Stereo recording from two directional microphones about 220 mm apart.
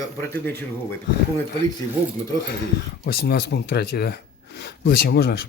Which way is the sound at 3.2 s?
50° left (ahead or behind).